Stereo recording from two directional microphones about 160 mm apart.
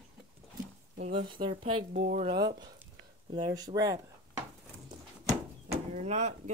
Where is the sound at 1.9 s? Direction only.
50° right (ahead or behind).